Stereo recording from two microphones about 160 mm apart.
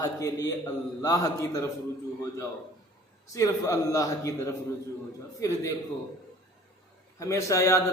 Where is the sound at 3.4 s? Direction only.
20° left (ahead or behind).